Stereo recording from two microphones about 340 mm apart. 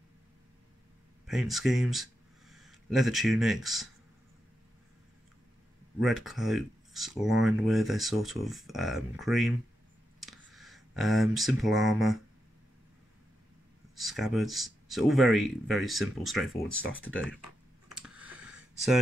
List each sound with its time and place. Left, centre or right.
1.2 s speech: centre
5.9 s speech: centre
13.9 s speech: centre
16.8 s speech: left
18.0 s a sound: centre